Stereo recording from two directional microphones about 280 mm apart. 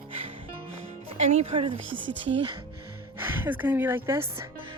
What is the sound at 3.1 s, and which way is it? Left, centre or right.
Speech, centre.